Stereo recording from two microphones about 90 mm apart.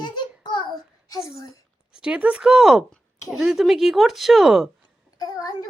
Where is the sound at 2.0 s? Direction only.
10° right (ahead or behind).